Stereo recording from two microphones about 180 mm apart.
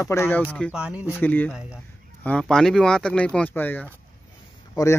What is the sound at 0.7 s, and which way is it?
Speech, 5° right (ahead or behind).